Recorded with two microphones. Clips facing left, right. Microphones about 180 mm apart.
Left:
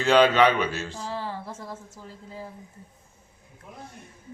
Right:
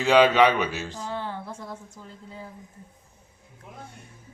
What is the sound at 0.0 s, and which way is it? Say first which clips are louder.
Speech: right 1 dB; 10° right (ahead or behind).